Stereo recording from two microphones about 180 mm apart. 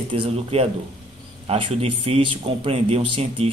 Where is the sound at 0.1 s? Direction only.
30° right (ahead or behind).